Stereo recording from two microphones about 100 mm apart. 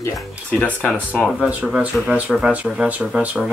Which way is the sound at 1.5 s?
15° right (ahead or behind).